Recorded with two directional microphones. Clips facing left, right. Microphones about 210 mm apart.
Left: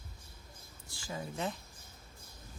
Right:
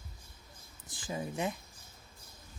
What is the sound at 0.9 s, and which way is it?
Speech, 20° right (ahead or behind).